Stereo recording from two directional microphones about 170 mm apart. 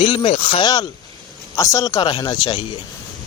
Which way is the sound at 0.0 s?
30° left (ahead or behind).